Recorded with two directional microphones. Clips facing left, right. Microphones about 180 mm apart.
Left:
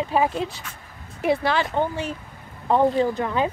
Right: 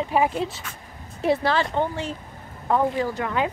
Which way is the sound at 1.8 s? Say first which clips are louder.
Left 1 dB; 10° left (ahead or behind).